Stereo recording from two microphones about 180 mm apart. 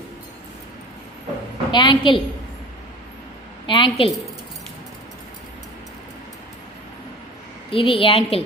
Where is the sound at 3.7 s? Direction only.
30° left (ahead or behind).